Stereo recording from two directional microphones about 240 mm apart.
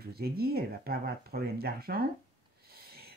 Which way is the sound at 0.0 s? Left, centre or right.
Right.